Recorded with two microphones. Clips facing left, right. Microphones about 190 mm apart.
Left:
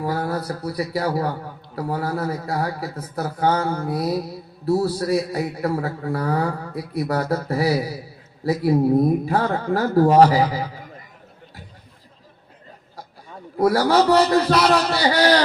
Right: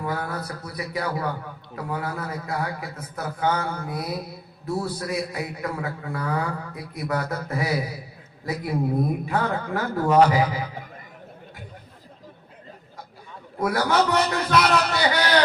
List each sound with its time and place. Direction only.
0.0 s a man's voice: 35° left (ahead or behind)
13.6 s a man's voice: 35° left (ahead or behind)